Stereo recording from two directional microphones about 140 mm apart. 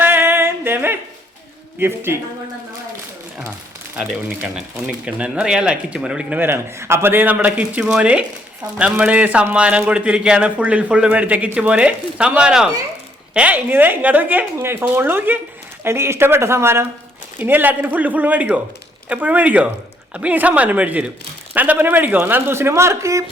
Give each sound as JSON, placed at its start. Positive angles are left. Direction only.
{"t": 0.0, "sound": "a sound", "side_deg": -15}
{"t": 1.8, "sound": "speech", "side_deg": -15}
{"t": 3.9, "sound": "speech", "side_deg": -5}